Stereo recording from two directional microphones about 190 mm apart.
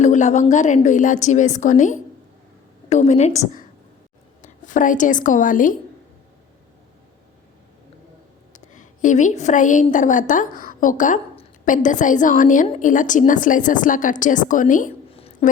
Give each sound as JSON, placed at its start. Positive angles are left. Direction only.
{"t": 0.0, "sound": "a woman's voice", "side_deg": 40}
{"t": 8.5, "sound": "a woman's voice", "side_deg": 40}
{"t": 15.1, "sound": "a sound", "side_deg": 30}